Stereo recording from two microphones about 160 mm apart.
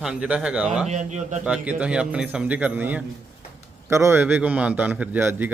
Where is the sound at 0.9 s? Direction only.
45° right (ahead or behind).